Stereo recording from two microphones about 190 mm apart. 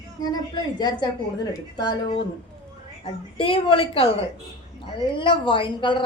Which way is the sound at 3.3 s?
25° left (ahead or behind).